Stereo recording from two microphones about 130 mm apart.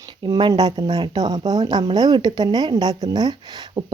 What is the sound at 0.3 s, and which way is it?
Speech, 35° right (ahead or behind).